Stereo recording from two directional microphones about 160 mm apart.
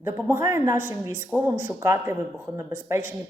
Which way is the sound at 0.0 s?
15° right (ahead or behind).